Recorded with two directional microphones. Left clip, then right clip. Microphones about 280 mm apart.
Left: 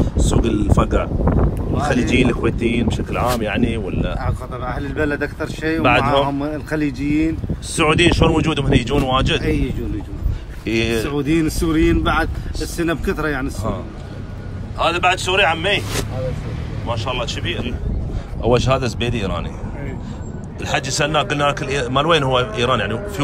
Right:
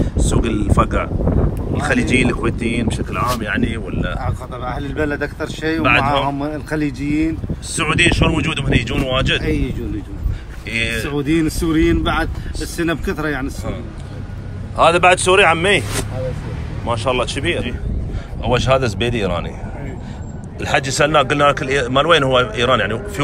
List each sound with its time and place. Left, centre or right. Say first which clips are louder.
0.0 s a sound: even; centre
1.8 s a man's voice: right 1 dB; centre
4.2 s a man's voice: even; centre
14.8 s a man's voice: right 5 dB; centre
16.8 s a man's voice: right 5 dB; centre
20.6 s a man's voice: right 4 dB; centre